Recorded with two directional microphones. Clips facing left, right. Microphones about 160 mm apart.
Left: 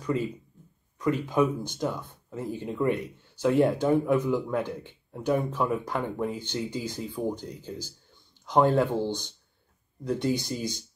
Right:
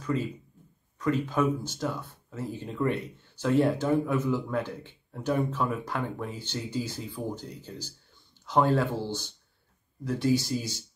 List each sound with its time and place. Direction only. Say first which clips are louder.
0.9 s speech: left 2 dB; 15° left (ahead or behind)